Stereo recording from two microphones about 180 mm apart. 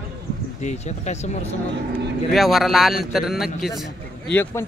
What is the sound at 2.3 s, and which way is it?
Speech, centre (ahead or behind).